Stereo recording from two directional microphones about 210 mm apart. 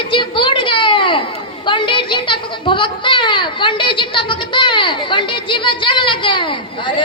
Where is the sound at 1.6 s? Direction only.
25° left (ahead or behind).